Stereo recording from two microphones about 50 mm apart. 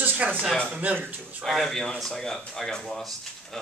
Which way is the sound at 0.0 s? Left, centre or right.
Right.